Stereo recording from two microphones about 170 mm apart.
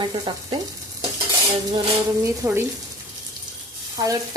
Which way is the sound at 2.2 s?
15° right (ahead or behind).